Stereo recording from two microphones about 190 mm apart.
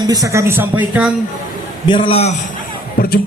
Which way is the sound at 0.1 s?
15° right (ahead or behind).